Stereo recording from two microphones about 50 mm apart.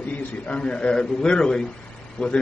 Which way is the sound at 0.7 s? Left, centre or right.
Centre.